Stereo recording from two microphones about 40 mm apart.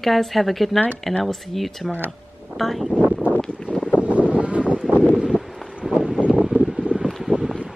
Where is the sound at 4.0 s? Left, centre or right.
Right.